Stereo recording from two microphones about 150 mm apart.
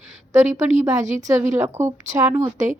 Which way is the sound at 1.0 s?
55° right (ahead or behind).